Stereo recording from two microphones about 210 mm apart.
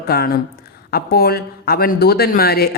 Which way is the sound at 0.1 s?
45° left (ahead or behind).